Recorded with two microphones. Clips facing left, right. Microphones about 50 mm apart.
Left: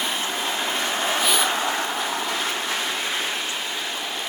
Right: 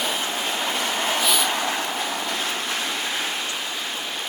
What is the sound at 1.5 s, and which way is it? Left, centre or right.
Vehicle, left.